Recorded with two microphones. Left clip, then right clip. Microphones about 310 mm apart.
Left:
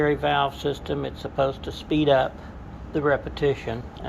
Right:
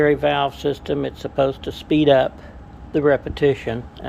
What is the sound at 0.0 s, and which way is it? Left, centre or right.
Speech, centre.